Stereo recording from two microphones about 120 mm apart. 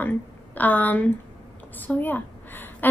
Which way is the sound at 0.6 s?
15° left (ahead or behind).